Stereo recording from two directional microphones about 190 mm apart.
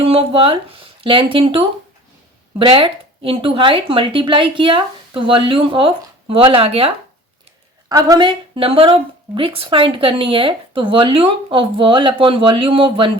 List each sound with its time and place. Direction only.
0.0 s speech: 30° right (ahead or behind)
7.9 s speech: 20° right (ahead or behind)